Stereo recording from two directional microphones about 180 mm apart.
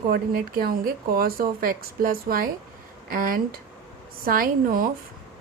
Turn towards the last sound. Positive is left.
turn(degrees=-50)  # may be behind; listen again after turning